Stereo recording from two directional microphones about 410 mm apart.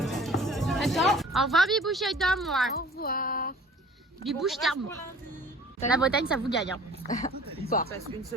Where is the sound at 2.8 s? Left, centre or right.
Left.